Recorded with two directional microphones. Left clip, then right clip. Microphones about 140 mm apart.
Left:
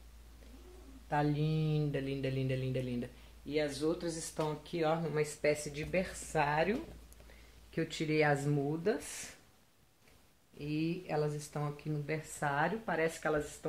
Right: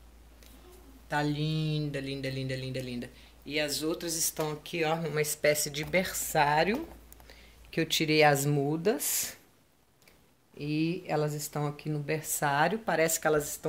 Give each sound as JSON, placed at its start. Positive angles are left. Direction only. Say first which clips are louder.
{"t": 1.1, "sound": "speech", "louder": "right 3 dB", "side_deg": 30}
{"t": 8.0, "sound": "speech", "louder": "right 7 dB", "side_deg": -50}
{"t": 10.6, "sound": "speech", "louder": "right 6 dB", "side_deg": -70}